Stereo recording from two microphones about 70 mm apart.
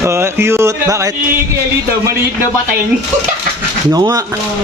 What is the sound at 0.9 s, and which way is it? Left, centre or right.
Speech, right.